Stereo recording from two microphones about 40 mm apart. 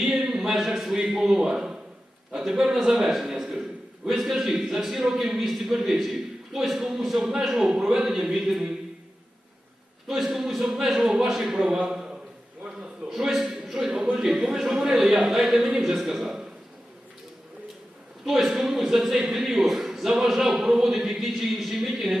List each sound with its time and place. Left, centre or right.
0.0 s a sound: centre
0.7 s a man's voice: centre
0.9 s a man's voice: right
3.0 s a man's voice: centre
10.1 s a man's voice: centre
13.1 s a man's voice: centre
18.3 s a man's voice: centre